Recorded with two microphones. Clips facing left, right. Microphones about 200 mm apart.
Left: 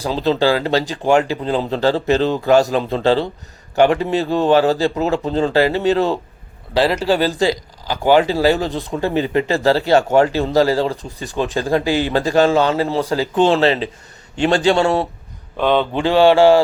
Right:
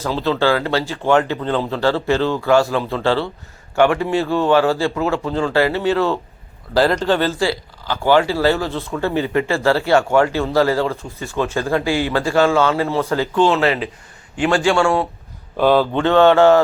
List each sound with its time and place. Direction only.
0.0 s a man's voice: 15° left (ahead or behind)
4.5 s speech: 35° left (ahead or behind)
4.8 s a man's voice: 20° left (ahead or behind)
6.7 s speech: 5° left (ahead or behind); by 9.6 s 20° left (ahead or behind)
9.6 s speech: 35° left (ahead or behind)
10.1 s a man's voice: 20° left (ahead or behind)
10.7 s speech: 35° left (ahead or behind)
10.9 s a man's voice: 15° left (ahead or behind)
15.5 s speech: 5° right (ahead or behind)
16.2 s a man's voice: 30° left (ahead or behind)